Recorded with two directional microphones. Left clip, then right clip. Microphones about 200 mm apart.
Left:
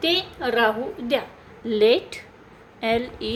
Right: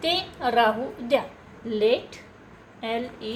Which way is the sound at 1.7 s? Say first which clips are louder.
Left 4 dB; 45° left (ahead or behind).